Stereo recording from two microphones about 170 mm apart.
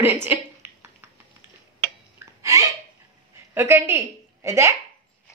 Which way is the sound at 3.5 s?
15° right (ahead or behind).